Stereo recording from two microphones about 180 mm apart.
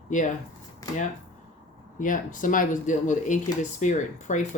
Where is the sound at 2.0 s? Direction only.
45° left (ahead or behind).